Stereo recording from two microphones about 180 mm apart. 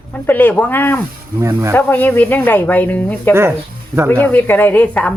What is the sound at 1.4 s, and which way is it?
Speech, 15° right (ahead or behind).